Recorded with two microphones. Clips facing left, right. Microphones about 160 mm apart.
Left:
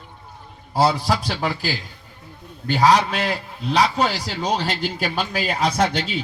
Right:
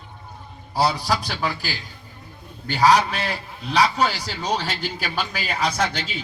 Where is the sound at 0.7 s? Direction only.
25° left (ahead or behind).